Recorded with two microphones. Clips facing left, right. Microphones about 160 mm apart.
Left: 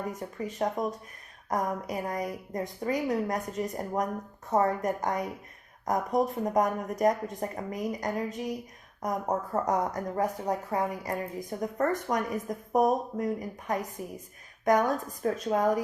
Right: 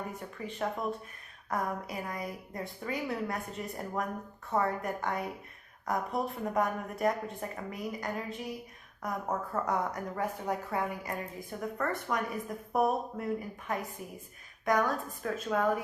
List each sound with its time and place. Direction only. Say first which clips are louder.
0.2 s speech: left 5 dB; 40° left (ahead or behind)
6.4 s a woman's voice: left 4 dB; 40° left (ahead or behind)
14.8 s speech: left 5 dB; 40° left (ahead or behind)